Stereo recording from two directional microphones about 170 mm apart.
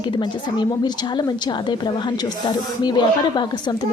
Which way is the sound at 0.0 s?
25° left (ahead or behind).